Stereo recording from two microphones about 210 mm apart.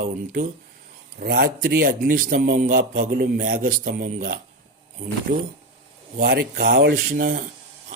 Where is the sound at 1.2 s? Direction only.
45° right (ahead or behind).